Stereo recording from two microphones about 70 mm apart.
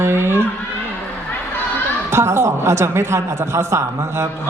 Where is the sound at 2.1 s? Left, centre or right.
Right.